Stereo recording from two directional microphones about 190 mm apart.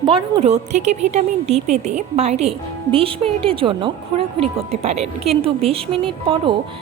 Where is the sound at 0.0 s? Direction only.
30° right (ahead or behind).